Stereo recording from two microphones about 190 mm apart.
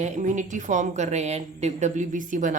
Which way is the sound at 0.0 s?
40° right (ahead or behind).